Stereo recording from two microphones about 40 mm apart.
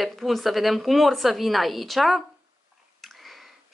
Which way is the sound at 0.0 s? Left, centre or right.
Centre.